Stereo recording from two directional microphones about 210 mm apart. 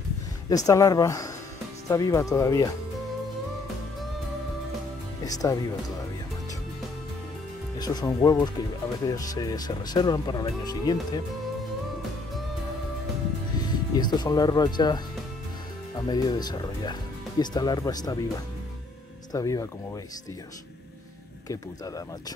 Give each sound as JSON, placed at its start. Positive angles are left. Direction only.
{"t": 0.5, "sound": "speech", "side_deg": 15}
{"t": 5.2, "sound": "speech", "side_deg": 15}
{"t": 7.8, "sound": "speech", "side_deg": 20}
{"t": 13.6, "sound": "speech", "side_deg": 20}
{"t": 16.0, "sound": "speech", "side_deg": 20}
{"t": 19.3, "sound": "speech", "side_deg": 15}
{"t": 21.5, "sound": "speech", "side_deg": 15}